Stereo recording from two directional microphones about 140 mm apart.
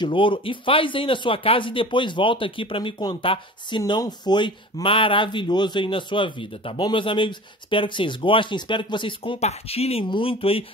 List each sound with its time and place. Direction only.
0.0 s speech: 35° left (ahead or behind)
9.4 s speech: 50° left (ahead or behind)